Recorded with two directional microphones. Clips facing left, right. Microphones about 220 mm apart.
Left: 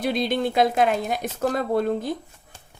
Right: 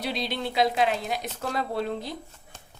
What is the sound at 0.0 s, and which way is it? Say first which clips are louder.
A woman's voice: left 7 dB; 50° left (ahead or behind).